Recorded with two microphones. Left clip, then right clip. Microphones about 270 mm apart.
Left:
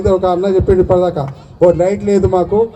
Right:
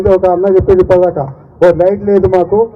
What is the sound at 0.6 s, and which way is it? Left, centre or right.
A man's voice, left.